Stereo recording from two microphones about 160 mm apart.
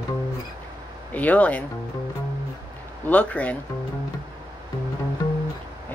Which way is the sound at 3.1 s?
10° left (ahead or behind).